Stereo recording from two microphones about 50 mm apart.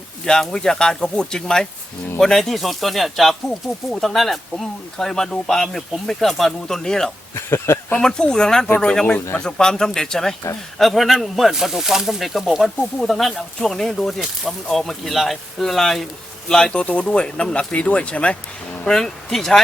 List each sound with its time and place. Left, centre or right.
0.3 s speech: centre
7.3 s speech: left
7.9 s speech: centre
16.8 s speech: left
18.9 s speech: centre